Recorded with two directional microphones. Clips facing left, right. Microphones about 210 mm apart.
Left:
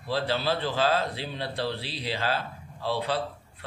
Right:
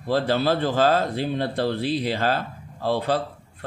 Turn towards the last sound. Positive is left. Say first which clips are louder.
# right 2 dB
turn(degrees=-45)  # may be behind; listen again after turning